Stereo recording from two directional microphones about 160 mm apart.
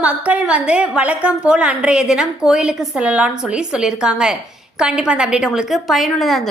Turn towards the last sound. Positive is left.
turn(degrees=0)  # may be behind; listen again after turning